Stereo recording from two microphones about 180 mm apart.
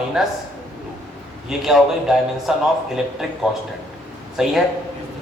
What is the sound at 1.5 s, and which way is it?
A man's voice, centre (ahead or behind).